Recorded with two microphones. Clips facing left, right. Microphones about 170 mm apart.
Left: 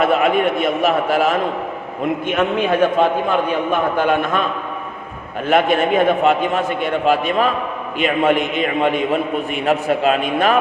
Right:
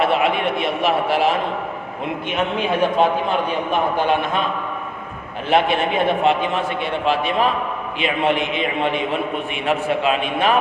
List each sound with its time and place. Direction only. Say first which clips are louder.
0.0 s a man's voice: left 3 dB; 45° left (ahead or behind)
5.5 s a man's voice: left 3 dB; 45° left (ahead or behind)